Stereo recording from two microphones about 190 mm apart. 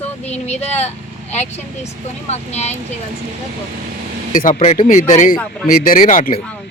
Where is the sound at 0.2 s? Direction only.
35° left (ahead or behind).